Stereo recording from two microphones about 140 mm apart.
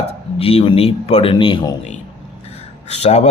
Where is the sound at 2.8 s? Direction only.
50° left (ahead or behind).